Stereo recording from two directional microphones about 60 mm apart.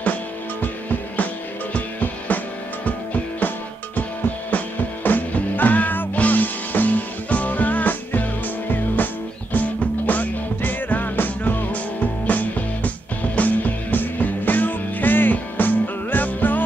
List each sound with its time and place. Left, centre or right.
1.1 s music: left